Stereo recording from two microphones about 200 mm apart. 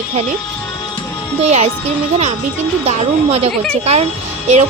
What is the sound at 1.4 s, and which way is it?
Speech, 35° right (ahead or behind).